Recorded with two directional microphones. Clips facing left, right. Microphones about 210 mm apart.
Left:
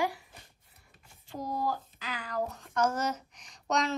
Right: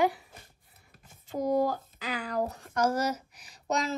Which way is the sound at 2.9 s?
10° right (ahead or behind).